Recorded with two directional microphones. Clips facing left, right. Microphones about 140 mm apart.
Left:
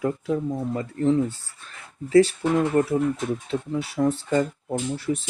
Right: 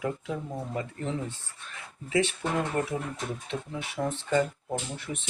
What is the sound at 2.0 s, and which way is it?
Speech, 40° left (ahead or behind).